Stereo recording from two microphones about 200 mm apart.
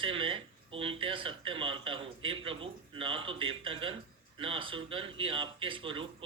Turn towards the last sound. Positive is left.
turn(degrees=-25)  # may be behind; listen again after turning